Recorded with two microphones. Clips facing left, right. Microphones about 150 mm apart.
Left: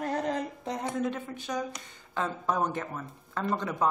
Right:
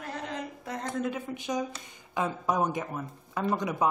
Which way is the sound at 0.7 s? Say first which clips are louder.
Left 1 dB; 15° left (ahead or behind).